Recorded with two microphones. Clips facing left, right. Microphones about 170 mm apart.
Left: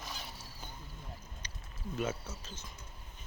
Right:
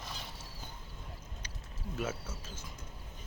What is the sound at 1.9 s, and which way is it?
Speech, 5° right (ahead or behind).